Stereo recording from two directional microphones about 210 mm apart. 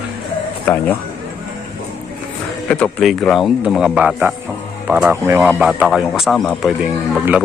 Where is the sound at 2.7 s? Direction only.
5° left (ahead or behind).